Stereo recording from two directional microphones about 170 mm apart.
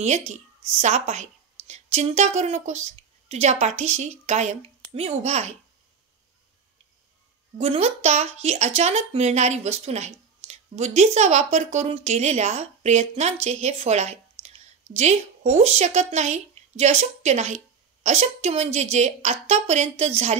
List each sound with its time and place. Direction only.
0.3 s speech: 40° right (ahead or behind)
7.5 s speech: 40° right (ahead or behind)